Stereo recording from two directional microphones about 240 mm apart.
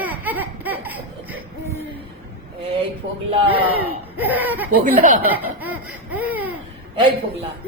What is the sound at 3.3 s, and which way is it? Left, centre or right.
Speech, right.